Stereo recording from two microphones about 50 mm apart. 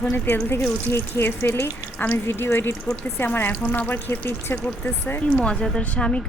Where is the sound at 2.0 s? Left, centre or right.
Left.